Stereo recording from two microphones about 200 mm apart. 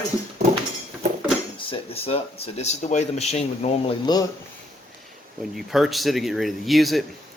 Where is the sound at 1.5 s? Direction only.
30° left (ahead or behind).